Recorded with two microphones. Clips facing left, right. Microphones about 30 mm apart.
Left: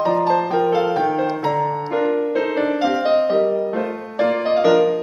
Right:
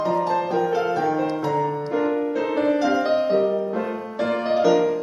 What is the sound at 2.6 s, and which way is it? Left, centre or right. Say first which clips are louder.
Music: right 2 dB; centre.